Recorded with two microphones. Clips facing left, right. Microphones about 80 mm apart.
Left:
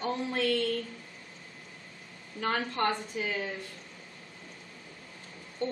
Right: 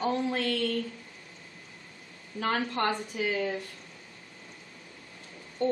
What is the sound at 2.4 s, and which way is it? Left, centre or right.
A woman's voice, right.